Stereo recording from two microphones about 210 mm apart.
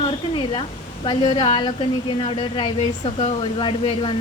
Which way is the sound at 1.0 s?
25° left (ahead or behind).